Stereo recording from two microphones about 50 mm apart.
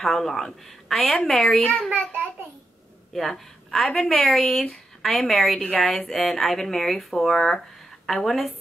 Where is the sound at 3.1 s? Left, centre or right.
Centre.